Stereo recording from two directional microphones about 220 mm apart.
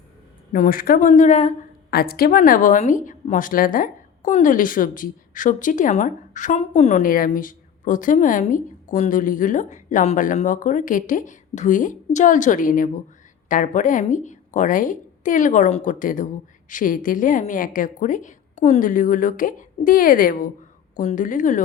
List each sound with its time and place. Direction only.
0.5 s a woman's voice: 40° left (ahead or behind)
1.9 s a woman's voice: 45° left (ahead or behind)